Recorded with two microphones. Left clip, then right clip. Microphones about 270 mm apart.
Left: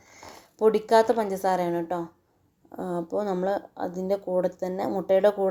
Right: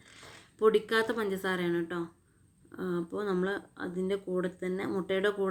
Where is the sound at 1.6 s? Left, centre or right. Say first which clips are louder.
Left 5 dB; centre.